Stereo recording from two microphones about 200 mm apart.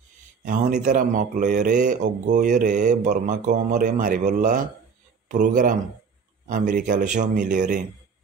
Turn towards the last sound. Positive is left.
turn(degrees=-40)  # may be behind; listen again after turning